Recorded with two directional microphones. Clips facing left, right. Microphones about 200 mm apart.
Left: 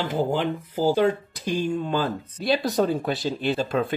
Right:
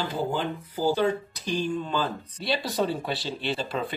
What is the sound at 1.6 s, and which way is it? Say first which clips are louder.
Speech: left 3 dB; 50° left (ahead or behind).